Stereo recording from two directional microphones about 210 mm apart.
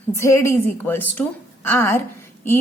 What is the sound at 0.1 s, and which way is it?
A woman's voice, 15° left (ahead or behind).